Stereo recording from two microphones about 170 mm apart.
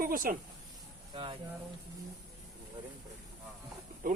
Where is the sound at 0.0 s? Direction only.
55° right (ahead or behind).